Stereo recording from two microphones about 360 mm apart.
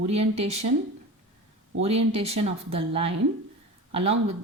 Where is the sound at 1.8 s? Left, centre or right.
Centre.